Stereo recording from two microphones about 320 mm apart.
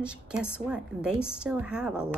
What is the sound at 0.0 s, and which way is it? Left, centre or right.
A woman's voice, centre.